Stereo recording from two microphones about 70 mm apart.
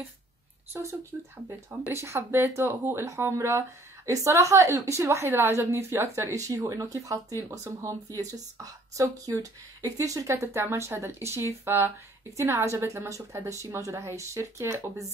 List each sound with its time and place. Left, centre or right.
1.1 s speech: right
6.3 s speech: right
10.3 s speech: right
12.4 s speech: right